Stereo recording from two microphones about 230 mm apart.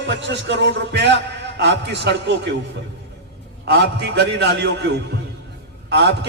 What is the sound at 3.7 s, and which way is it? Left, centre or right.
A man's voice, right.